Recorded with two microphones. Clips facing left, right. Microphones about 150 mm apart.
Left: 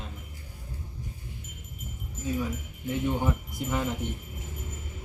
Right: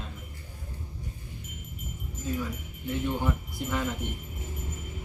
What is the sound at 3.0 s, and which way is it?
Speech, 15° left (ahead or behind).